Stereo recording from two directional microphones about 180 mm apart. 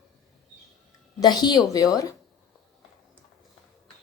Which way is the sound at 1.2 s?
25° left (ahead or behind).